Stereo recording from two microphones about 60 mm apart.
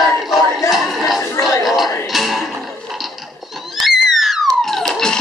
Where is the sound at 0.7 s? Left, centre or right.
Centre.